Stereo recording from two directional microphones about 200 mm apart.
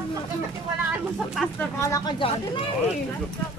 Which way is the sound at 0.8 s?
10° right (ahead or behind).